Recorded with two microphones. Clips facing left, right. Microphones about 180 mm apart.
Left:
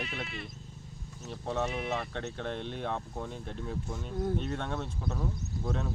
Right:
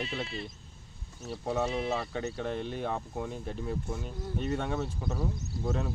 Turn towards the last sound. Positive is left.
turn(degrees=-5)  # may be behind; listen again after turning